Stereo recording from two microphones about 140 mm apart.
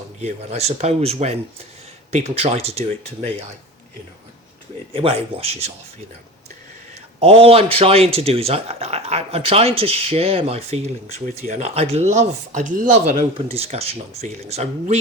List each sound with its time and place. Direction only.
0.2 s speech: 50° right (ahead or behind)
4.9 s speech: 40° right (ahead or behind)
7.2 s speech: 45° right (ahead or behind); by 13.2 s 70° right (ahead or behind)
13.3 s speech: 45° right (ahead or behind)